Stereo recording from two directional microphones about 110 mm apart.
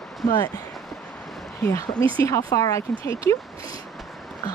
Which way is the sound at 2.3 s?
30° left (ahead or behind).